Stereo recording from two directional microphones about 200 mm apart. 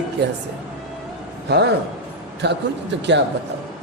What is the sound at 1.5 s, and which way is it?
A man's voice, 55° right (ahead or behind).